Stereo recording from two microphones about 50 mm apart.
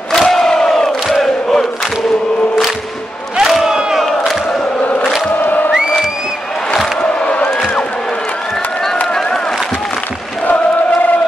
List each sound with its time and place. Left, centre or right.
0.1 s crowd: centre
1.0 s a sound: centre
3.3 s crowd: centre
5.4 s music: left
7.0 s crowd: left
9.0 s a sound: centre